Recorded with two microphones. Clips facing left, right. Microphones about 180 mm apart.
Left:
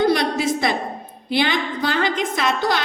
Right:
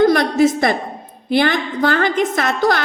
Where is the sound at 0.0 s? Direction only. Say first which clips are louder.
Right 6 dB; 50° right (ahead or behind).